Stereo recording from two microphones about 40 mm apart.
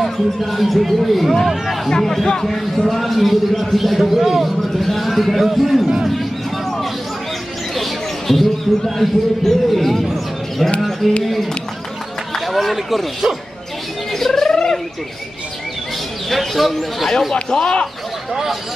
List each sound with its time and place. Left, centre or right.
0.0 s a man's voice: centre
6.0 s a sound: centre
7.7 s a man's voice: centre
12.4 s speech: centre
14.1 s rodents: centre
16.3 s a man's voice: centre
17.3 s speech: left